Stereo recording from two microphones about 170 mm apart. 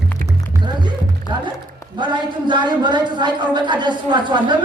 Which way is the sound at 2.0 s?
25° right (ahead or behind).